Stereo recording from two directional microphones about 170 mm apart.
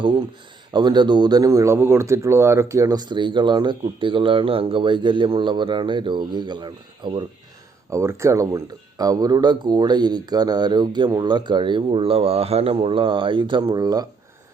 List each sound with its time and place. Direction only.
0.7 s speech: 25° right (ahead or behind)
7.9 s speech: 15° right (ahead or behind)